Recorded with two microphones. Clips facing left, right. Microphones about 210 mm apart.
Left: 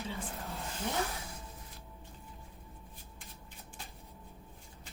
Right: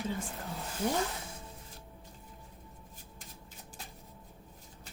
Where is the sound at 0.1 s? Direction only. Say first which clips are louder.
Right 4 dB; 45° right (ahead or behind).